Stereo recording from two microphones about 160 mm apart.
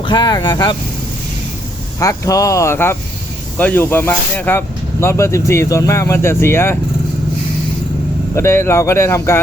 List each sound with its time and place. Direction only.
0.0 s speech: 30° left (ahead or behind)
2.0 s speech: 20° left (ahead or behind)
8.4 s speech: 15° left (ahead or behind)